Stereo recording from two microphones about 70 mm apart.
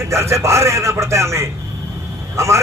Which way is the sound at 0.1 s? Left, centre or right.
Right.